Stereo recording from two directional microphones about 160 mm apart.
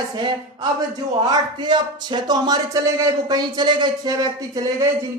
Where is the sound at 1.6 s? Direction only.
30° right (ahead or behind).